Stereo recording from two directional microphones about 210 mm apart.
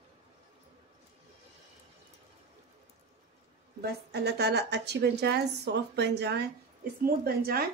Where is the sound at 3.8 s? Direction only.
50° right (ahead or behind).